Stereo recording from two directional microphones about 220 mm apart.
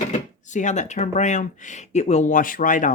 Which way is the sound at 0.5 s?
35° left (ahead or behind).